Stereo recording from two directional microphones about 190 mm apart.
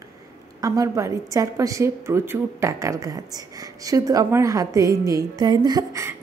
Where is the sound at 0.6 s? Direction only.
15° right (ahead or behind).